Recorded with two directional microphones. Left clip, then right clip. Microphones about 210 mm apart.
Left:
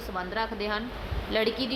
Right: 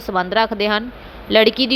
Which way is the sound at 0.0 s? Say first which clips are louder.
Right 14 dB; 30° right (ahead or behind).